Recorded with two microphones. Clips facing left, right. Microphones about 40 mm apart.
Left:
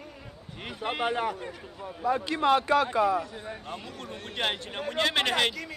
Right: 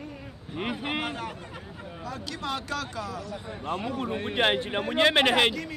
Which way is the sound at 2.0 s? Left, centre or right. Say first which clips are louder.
Left 10 dB; left.